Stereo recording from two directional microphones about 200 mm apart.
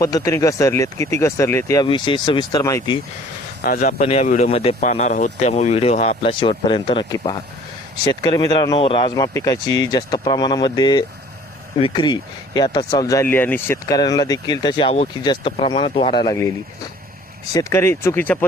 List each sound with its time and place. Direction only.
0.0 s speech: 15° left (ahead or behind)
3.6 s speech: 45° left (ahead or behind); by 18.4 s 10° left (ahead or behind)